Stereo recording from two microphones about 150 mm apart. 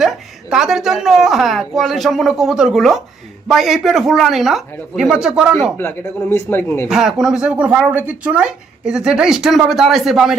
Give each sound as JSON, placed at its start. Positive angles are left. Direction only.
{"t": 0.5, "sound": "speech", "side_deg": 0}
{"t": 5.7, "sound": "speech", "side_deg": 15}
{"t": 6.8, "sound": "speech", "side_deg": 0}